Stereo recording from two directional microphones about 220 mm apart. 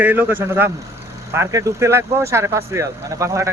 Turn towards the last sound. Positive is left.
turn(degrees=-15)  # may be behind; listen again after turning